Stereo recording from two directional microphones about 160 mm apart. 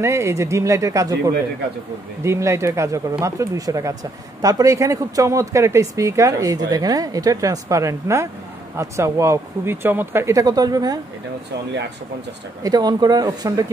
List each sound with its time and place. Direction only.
0.0 s speech: 15° right (ahead or behind)
12.6 s speech: 25° right (ahead or behind)